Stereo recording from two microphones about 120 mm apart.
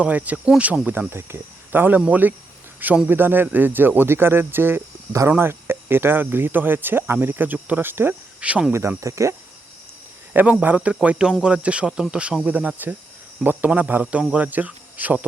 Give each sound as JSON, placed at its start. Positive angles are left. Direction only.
{"t": 0.0, "sound": "speech", "side_deg": -10}
{"t": 8.7, "sound": "speech", "side_deg": -25}
{"t": 10.3, "sound": "speech", "side_deg": -15}